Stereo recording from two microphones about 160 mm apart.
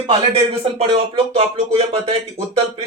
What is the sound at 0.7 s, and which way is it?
Speech, 40° right (ahead or behind).